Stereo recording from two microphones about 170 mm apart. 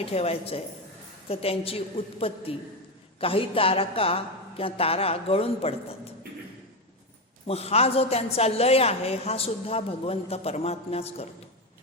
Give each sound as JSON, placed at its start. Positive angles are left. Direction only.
{"t": 0.0, "sound": "a woman's voice", "side_deg": 35}
{"t": 7.4, "sound": "a woman's voice", "side_deg": 35}